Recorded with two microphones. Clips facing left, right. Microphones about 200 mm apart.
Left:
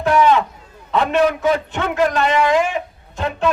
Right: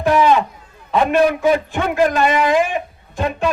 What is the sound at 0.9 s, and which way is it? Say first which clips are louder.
A man's voice: right 2 dB; 10° right (ahead or behind).